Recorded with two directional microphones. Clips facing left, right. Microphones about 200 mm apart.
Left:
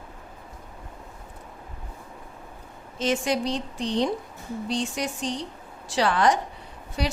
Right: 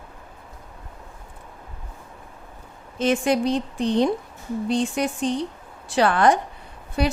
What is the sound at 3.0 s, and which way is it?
A woman's voice, 55° right (ahead or behind).